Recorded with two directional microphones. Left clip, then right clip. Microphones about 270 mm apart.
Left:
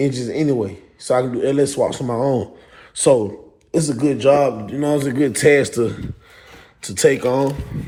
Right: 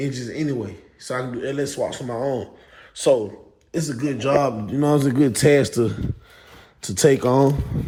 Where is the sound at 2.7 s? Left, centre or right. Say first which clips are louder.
Left 3 dB; left.